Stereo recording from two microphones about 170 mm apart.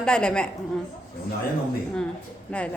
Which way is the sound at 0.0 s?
5° left (ahead or behind).